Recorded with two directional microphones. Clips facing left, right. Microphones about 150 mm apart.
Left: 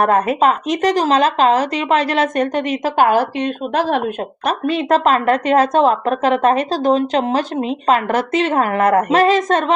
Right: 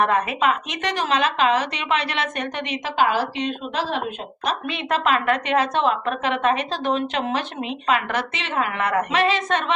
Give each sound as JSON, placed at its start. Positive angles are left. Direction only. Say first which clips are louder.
{"t": 0.0, "sound": "speech", "louder": "left 6 dB", "side_deg": 40}
{"t": 4.4, "sound": "a woman's voice", "louder": "left 8 dB", "side_deg": 40}